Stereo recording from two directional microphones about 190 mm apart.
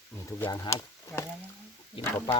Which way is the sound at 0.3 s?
20° left (ahead or behind).